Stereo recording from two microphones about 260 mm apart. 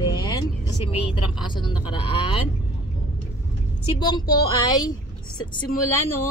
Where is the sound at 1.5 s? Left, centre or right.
Centre.